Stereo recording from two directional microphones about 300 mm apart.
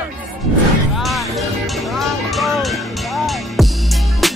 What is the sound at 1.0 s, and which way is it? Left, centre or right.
Music, centre.